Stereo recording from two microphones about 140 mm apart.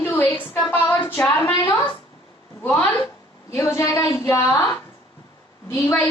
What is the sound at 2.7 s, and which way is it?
A woman's voice, 20° left (ahead or behind).